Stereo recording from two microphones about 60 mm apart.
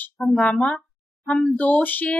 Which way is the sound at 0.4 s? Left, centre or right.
Centre.